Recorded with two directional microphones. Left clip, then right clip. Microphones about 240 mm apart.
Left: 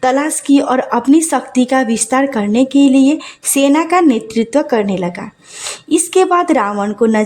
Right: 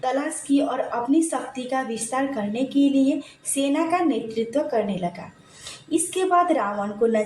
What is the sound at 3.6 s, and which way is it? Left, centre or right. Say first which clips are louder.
Speech: left 11 dB; left.